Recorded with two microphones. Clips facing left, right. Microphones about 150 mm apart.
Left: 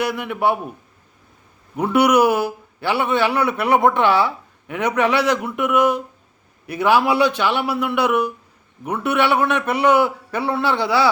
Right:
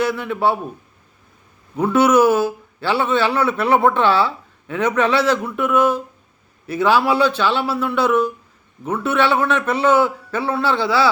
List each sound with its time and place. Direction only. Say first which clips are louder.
0.0 s a man's voice: right 1 dB; 15° left (ahead or behind)
1.7 s a man's voice: right 1 dB; 20° left (ahead or behind)